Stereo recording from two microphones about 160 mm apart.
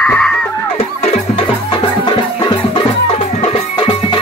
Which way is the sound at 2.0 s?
30° left (ahead or behind).